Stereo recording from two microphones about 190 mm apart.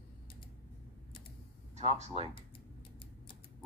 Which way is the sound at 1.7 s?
35° right (ahead or behind).